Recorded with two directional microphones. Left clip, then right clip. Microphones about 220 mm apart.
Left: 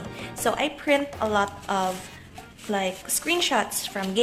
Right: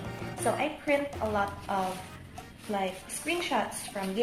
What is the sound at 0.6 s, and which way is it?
A woman's voice, 45° left (ahead or behind).